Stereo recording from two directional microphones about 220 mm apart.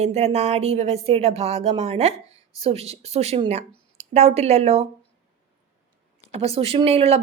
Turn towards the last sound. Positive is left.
turn(degrees=-30)  # may be behind; listen again after turning